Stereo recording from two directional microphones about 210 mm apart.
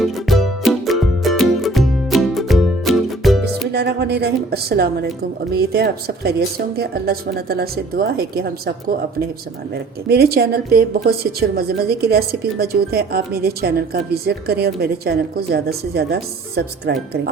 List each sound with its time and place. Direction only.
0.0 s music: centre (ahead or behind)
3.7 s a woman's voice: 50° right (ahead or behind)
10.1 s a woman's voice: 50° right (ahead or behind)